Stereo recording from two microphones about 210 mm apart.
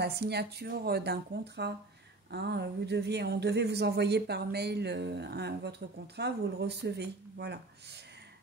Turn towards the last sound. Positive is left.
turn(degrees=-50)  # may be behind; listen again after turning